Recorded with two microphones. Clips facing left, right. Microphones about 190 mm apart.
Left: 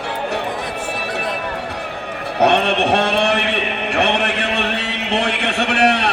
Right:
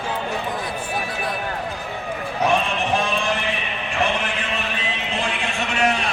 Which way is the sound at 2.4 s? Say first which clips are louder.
Left 6 dB; 70° left (ahead or behind).